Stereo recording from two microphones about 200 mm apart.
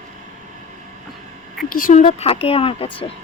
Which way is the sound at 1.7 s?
45° left (ahead or behind).